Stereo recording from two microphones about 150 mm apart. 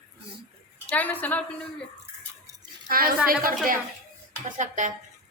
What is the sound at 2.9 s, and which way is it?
Speech, 75° right (ahead or behind).